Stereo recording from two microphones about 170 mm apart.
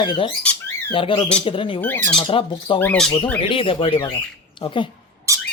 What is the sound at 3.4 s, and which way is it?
Speech, 30° left (ahead or behind).